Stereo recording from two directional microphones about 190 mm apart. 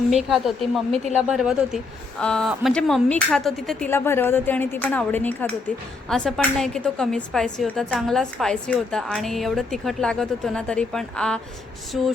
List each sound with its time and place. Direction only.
0.1 s a woman's voice: centre (ahead or behind)